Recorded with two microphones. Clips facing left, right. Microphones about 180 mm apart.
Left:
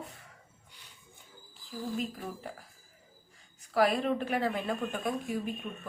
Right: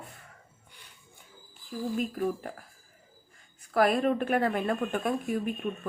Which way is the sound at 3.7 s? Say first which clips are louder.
Right 3 dB; 50° right (ahead or behind).